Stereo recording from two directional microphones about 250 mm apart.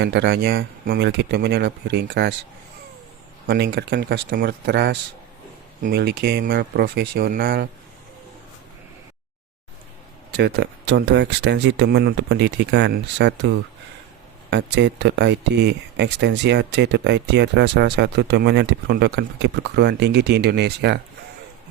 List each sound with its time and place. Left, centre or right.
0.0 s speech: right
3.4 s speech: right
10.3 s speech: right
14.5 s speech: right